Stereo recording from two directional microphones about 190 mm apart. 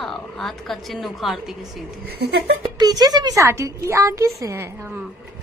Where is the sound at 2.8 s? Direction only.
20° right (ahead or behind).